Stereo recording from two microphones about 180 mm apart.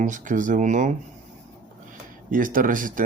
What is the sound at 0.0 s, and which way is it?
Speech, 45° right (ahead or behind).